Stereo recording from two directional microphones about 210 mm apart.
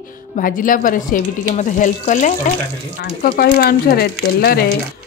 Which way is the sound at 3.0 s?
50° left (ahead or behind).